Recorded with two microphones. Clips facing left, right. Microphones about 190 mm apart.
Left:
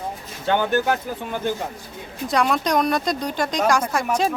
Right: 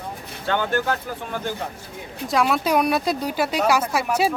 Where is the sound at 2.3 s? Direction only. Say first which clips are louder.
Even; 5° right (ahead or behind).